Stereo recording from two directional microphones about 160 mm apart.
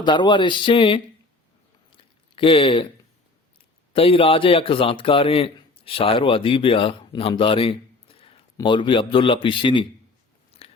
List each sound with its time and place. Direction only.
0.0 s speech: 30° left (ahead or behind)
1.9 s a sound: 30° left (ahead or behind)
3.9 s a man's voice: 35° left (ahead or behind)
10.6 s biting: 35° left (ahead or behind)